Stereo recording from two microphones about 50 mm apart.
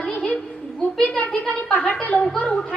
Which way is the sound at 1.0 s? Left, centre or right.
Left.